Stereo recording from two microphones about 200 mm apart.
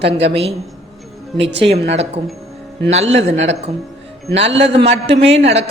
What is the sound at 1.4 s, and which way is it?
Speech, 60° right (ahead or behind).